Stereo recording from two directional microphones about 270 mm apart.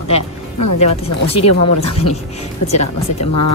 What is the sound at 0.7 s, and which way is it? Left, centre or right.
Speech, left.